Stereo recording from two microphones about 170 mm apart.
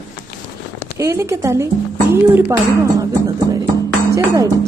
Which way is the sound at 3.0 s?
20° right (ahead or behind).